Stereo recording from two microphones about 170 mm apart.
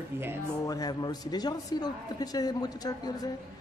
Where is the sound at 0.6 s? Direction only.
20° left (ahead or behind).